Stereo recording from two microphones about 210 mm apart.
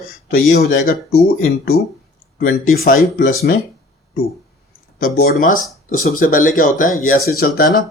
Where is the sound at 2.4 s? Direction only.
45° left (ahead or behind).